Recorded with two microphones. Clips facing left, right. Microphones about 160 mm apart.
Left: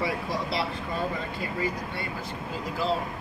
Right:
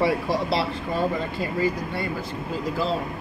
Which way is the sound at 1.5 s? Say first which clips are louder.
Right 6 dB; 35° right (ahead or behind).